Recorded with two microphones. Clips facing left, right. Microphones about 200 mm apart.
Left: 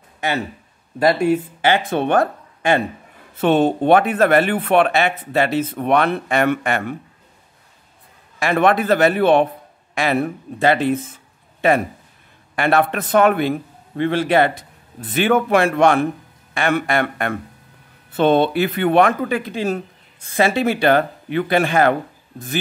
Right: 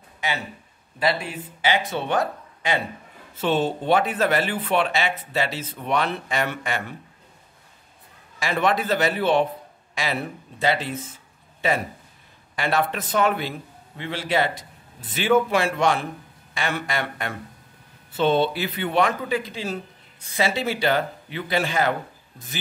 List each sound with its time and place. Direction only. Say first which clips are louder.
0.9 s speech: left 9 dB; 50° left (ahead or behind)
8.4 s speech: left 6 dB; 55° left (ahead or behind)